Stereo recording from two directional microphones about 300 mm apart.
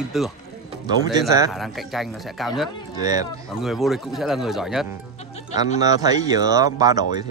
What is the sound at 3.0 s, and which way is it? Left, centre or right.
Speech, centre.